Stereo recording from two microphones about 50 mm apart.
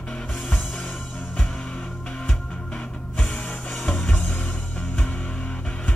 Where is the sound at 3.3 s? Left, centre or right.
Left.